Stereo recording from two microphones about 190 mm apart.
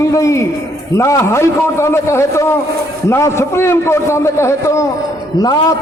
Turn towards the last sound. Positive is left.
turn(degrees=20)  # may be behind; listen again after turning